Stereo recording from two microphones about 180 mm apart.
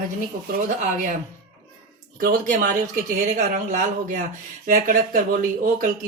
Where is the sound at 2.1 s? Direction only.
50° right (ahead or behind).